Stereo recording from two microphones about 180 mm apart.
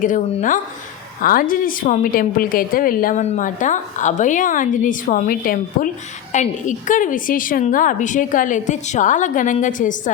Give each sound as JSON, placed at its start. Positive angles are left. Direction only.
{"t": 0.0, "sound": "a woman's voice", "side_deg": 45}